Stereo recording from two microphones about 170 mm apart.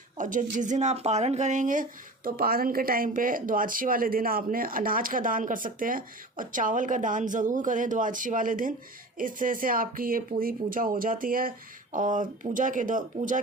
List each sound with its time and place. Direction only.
0.2 s speech: 50° right (ahead or behind)